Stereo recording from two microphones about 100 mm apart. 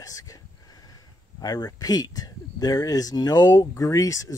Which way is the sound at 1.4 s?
40° left (ahead or behind).